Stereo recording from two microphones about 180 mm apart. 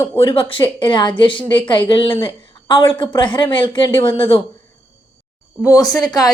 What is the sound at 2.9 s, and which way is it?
A woman's voice, 25° left (ahead or behind).